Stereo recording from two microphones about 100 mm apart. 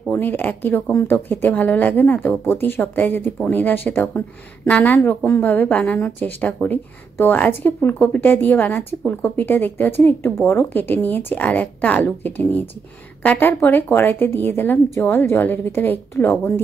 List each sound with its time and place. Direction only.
0.1 s a woman's voice: 20° left (ahead or behind)